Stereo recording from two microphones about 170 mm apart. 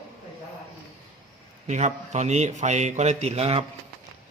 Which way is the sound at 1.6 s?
45° right (ahead or behind).